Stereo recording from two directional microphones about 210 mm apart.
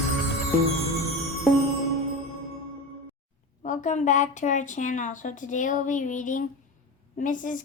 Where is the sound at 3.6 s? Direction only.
35° left (ahead or behind).